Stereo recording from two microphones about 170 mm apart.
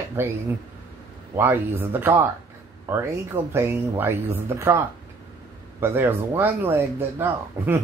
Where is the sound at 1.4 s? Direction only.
10° right (ahead or behind).